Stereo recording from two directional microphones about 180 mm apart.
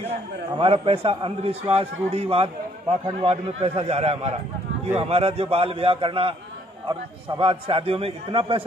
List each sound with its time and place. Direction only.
0.6 s a man's voice: 30° right (ahead or behind)